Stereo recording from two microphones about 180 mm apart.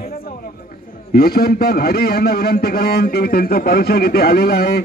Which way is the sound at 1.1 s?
60° left (ahead or behind).